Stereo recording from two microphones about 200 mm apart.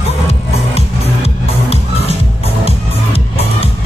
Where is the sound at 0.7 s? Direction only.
30° left (ahead or behind).